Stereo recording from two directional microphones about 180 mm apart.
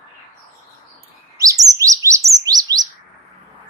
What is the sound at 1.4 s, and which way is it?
Chirp, 20° right (ahead or behind).